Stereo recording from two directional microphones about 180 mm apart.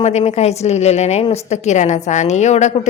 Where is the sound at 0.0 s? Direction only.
35° left (ahead or behind).